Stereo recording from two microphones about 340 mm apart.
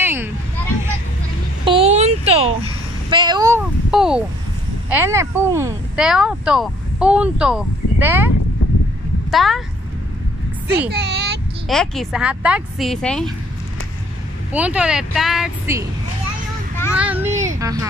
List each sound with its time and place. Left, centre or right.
0.0 s a sound: centre
1.6 s a sound: centre
4.8 s speech: centre
9.3 s speech: centre
10.9 s speech: right
11.7 s speech: centre
14.5 s speech: centre
16.9 s a child's voice: centre